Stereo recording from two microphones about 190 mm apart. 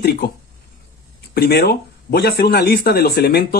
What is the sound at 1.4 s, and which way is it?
Speech, 60° left (ahead or behind).